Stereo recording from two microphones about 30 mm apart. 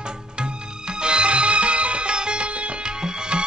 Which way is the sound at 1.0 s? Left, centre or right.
Right.